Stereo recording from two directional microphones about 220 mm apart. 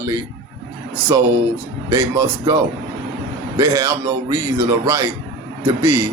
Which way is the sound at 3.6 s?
15° right (ahead or behind).